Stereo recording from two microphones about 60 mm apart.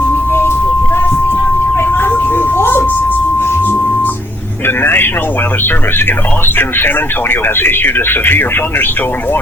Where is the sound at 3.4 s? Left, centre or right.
Left.